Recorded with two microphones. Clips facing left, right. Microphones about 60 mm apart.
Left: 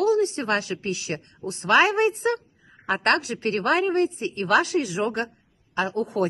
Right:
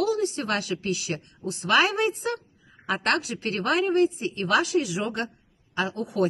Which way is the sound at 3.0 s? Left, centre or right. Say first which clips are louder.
Left 4 dB; left.